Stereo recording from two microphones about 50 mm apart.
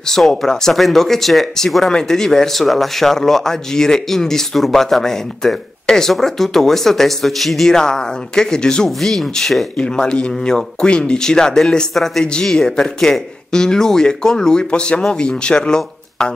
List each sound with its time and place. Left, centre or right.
0.1 s speech: centre
9.8 s speech: centre